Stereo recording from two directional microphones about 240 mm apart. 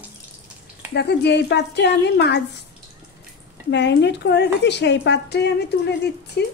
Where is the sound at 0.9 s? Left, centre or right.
Left.